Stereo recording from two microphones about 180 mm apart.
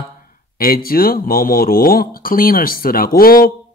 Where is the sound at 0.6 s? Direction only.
55° left (ahead or behind).